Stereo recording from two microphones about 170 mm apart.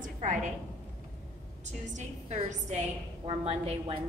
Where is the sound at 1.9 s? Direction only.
40° right (ahead or behind).